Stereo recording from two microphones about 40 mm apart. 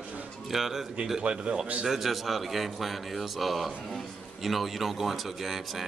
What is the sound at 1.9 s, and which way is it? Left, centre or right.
A man's voice, centre.